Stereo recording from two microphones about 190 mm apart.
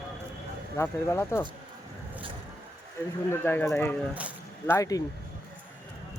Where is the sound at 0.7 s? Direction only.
15° left (ahead or behind).